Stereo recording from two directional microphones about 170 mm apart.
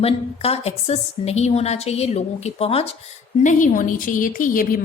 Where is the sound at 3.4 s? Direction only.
50° left (ahead or behind).